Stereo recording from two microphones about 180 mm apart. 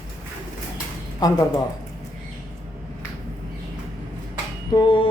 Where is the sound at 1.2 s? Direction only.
20° left (ahead or behind).